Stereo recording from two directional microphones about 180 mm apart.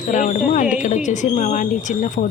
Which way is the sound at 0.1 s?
45° left (ahead or behind).